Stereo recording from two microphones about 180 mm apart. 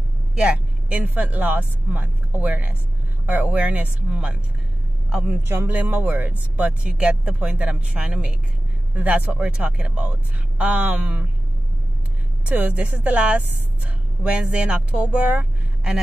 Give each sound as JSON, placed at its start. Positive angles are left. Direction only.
{"t": 0.4, "sound": "speech", "side_deg": -5}
{"t": 5.5, "sound": "speech", "side_deg": -10}
{"t": 12.4, "sound": "speech", "side_deg": -10}